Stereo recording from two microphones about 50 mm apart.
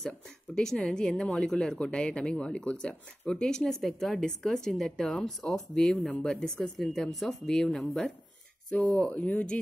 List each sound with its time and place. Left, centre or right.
0.6 s speech: centre